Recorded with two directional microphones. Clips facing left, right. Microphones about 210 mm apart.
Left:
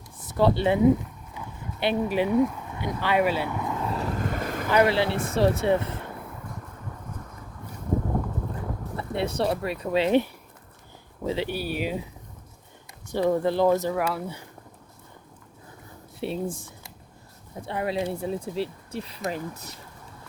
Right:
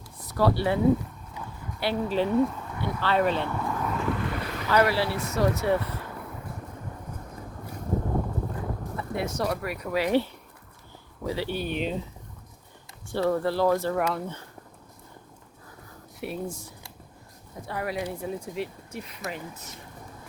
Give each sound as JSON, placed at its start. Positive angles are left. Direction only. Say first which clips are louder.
{"t": 0.3, "sound": "speech", "louder": "left 2 dB", "side_deg": 20}
{"t": 1.8, "sound": "speech", "louder": "left 2 dB", "side_deg": 20}
{"t": 3.9, "sound": "boat", "louder": "even", "side_deg": 40}
{"t": 4.7, "sound": "speech", "louder": "left 2 dB", "side_deg": 20}
{"t": 9.0, "sound": "speech", "louder": "left 3 dB", "side_deg": 30}
{"t": 11.5, "sound": "speech", "louder": "even", "side_deg": 5}
{"t": 13.1, "sound": "speech", "louder": "left 2 dB", "side_deg": 15}
{"t": 13.9, "sound": "speech", "louder": "even", "side_deg": 5}
{"t": 16.2, "sound": "speech", "louder": "left 4 dB", "side_deg": 30}
{"t": 17.7, "sound": "speech", "louder": "left 3 dB", "side_deg": 25}